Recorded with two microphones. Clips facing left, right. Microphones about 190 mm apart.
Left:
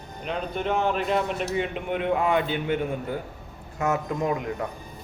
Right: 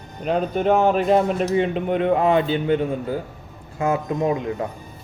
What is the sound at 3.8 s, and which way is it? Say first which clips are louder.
Speech: right 4 dB; 25° right (ahead or behind).